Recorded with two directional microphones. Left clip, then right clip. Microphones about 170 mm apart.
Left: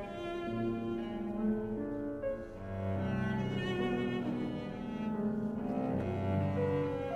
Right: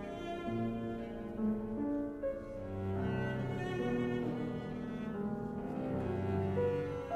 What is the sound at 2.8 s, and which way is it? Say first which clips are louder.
Cello: left 1 dB; 40° left (ahead or behind).